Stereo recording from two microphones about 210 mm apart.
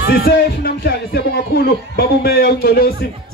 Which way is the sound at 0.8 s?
50° left (ahead or behind).